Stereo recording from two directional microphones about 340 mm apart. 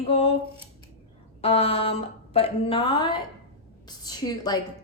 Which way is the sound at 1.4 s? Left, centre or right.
Centre.